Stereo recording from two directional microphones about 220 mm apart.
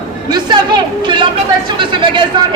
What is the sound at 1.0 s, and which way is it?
Speech, 20° right (ahead or behind).